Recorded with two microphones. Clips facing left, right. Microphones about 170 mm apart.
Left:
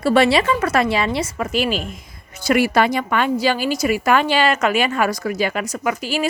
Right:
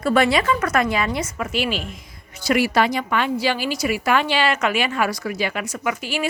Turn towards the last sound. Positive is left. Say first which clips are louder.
# left 3 dB
turn(degrees=40)  # may be behind; listen again after turning